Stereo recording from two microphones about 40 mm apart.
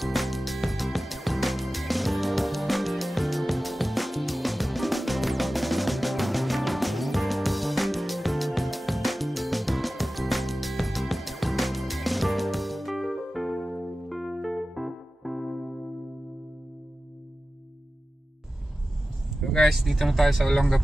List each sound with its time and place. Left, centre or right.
0.0 s music: centre
19.4 s speech: centre